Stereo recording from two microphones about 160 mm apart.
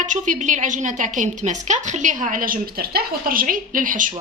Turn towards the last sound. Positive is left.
turn(degrees=-55)  # may be behind; listen again after turning